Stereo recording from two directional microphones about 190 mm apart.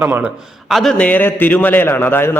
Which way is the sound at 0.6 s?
Centre (ahead or behind).